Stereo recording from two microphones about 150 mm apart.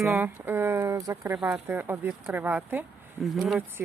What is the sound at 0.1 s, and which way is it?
Speech, 15° right (ahead or behind).